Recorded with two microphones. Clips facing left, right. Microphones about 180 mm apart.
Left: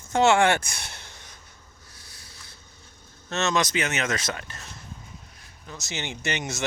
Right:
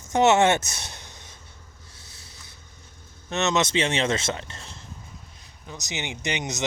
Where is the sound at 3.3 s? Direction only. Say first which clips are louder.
Right 2 dB; 20° right (ahead or behind).